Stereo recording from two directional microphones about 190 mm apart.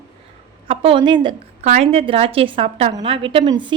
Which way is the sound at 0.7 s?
30° right (ahead or behind).